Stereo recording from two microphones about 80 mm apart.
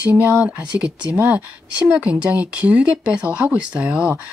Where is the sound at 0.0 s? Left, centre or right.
Centre.